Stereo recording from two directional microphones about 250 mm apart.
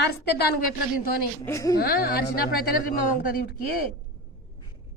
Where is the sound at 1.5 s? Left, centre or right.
Centre.